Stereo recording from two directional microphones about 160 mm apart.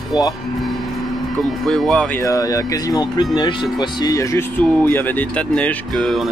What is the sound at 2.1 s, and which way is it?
Speech, 20° left (ahead or behind).